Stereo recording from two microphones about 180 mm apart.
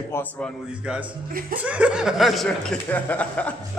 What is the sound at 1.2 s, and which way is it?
Speech, 50° right (ahead or behind).